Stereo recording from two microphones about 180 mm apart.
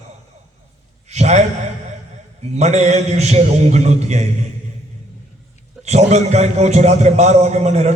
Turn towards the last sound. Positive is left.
turn(degrees=-40)  # may be behind; listen again after turning